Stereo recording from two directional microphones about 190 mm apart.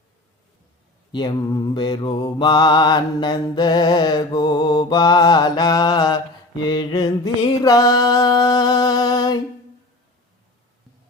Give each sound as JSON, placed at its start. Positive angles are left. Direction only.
{"t": 1.1, "sound": "mantra", "side_deg": 20}